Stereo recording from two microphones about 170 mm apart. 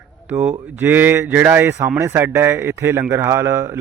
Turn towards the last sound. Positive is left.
turn(degrees=-15)  # may be behind; listen again after turning